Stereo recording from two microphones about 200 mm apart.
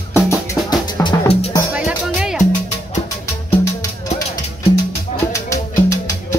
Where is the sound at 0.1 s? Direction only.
15° left (ahead or behind).